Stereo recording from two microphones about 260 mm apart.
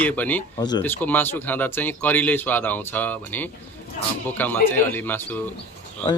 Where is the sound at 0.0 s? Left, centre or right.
Centre.